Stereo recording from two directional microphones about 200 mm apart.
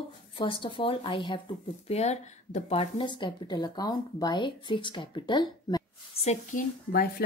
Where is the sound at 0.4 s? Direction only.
25° left (ahead or behind).